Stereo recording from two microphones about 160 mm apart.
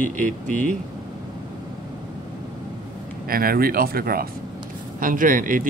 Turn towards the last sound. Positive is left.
turn(degrees=-55)  # may be behind; listen again after turning